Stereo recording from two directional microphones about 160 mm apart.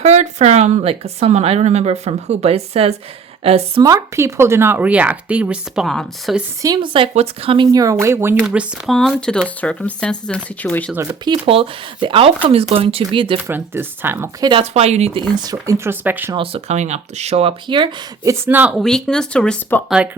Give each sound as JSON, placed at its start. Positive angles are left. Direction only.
{"t": 0.0, "sound": "a woman's voice", "side_deg": -45}
{"t": 3.8, "sound": "speech", "side_deg": -20}
{"t": 6.6, "sound": "speech", "side_deg": -25}
{"t": 8.4, "sound": "speech", "side_deg": 0}
{"t": 10.9, "sound": "speech", "side_deg": -10}
{"t": 11.4, "sound": "speech", "side_deg": -35}
{"t": 13.5, "sound": "speech", "side_deg": -15}
{"t": 14.4, "sound": "speech", "side_deg": -35}
{"t": 15.4, "sound": "speech", "side_deg": -20}
{"t": 16.3, "sound": "speech", "side_deg": -35}
{"t": 18.8, "sound": "speech", "side_deg": 5}